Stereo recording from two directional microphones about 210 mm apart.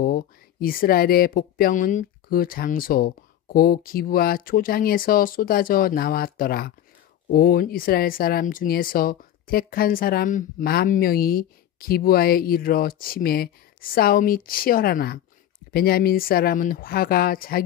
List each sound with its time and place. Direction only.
0.0 s speech: 45° left (ahead or behind)